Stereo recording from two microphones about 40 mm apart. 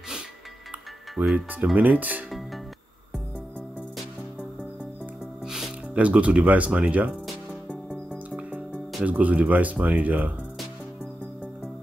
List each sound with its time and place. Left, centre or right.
1.3 s speech: right
5.4 s music: centre
5.9 s speech: right
7.6 s music: left
9.0 s speech: right